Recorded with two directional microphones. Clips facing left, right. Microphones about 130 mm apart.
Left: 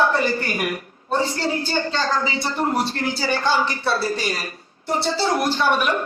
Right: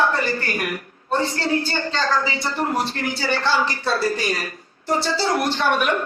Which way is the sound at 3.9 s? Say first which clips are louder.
Right 1 dB; 25° left (ahead or behind).